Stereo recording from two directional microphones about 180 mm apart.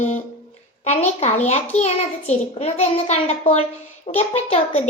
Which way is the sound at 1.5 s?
35° left (ahead or behind).